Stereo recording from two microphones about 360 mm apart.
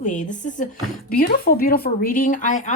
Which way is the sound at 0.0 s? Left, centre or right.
Left.